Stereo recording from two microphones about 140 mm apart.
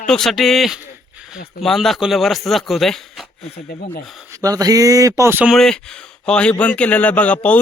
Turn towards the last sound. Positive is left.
turn(degrees=10)  # may be behind; listen again after turning